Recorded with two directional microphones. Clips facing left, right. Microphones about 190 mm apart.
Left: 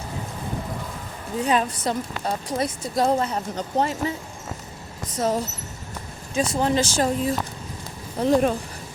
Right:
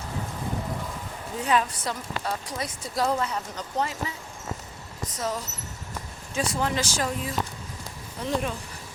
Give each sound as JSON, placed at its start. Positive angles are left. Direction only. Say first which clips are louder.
{"t": 1.4, "sound": "a woman's voice", "louder": "left 3 dB", "side_deg": 20}
{"t": 5.0, "sound": "a woman's voice", "louder": "left 7 dB", "side_deg": 30}
{"t": 8.2, "sound": "speech", "louder": "left 9 dB", "side_deg": 40}